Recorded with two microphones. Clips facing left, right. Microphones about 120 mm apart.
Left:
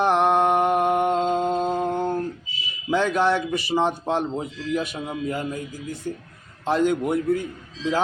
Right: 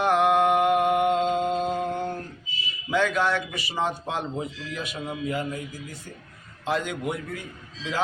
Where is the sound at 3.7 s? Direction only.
30° left (ahead or behind).